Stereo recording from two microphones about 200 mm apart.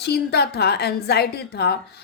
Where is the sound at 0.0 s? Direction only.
55° left (ahead or behind).